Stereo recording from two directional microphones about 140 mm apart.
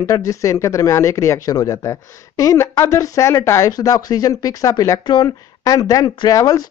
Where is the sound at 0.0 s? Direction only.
25° left (ahead or behind).